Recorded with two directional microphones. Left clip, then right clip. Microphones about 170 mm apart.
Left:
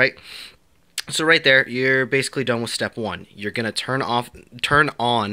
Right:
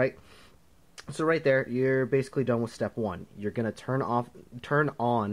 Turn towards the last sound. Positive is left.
turn(degrees=15)  # may be behind; listen again after turning